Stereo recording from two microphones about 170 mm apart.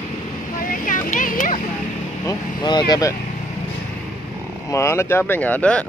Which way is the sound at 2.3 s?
25° left (ahead or behind).